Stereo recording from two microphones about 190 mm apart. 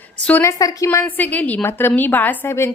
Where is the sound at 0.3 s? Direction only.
15° left (ahead or behind).